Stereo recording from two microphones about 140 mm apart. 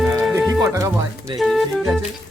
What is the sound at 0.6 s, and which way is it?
Speech, 20° right (ahead or behind).